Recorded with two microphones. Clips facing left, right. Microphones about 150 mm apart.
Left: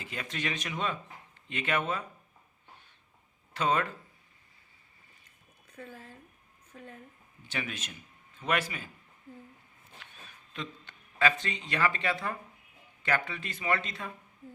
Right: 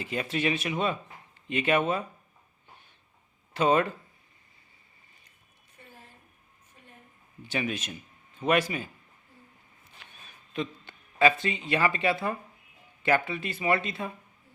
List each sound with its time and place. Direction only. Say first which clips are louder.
0.0 s speech: right 8 dB; 15° right (ahead or behind)
3.6 s speech: right 5 dB; 15° right (ahead or behind)
6.7 s a sound: left 11 dB; 90° left
7.5 s speech: right 7 dB; 15° right (ahead or behind)
10.0 s a sound: right 1 dB; 15° right (ahead or behind)
13.1 s speech: right 6 dB; 15° right (ahead or behind)